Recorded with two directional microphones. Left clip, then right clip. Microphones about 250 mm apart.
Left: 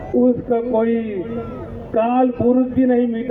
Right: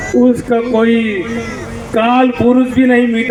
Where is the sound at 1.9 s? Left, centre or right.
Left.